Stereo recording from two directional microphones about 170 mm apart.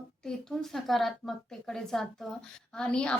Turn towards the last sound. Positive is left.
turn(degrees=5)  # may be behind; listen again after turning